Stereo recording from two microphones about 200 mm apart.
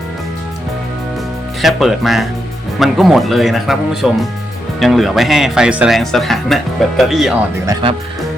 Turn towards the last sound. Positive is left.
turn(degrees=-20)  # may be behind; listen again after turning